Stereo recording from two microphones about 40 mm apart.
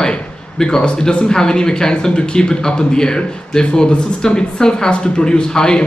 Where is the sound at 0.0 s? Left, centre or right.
Centre.